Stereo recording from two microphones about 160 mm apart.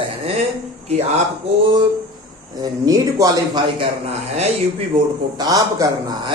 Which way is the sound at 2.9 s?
20° right (ahead or behind).